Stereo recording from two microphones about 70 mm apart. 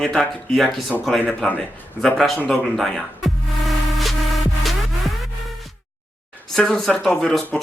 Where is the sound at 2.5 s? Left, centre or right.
Centre.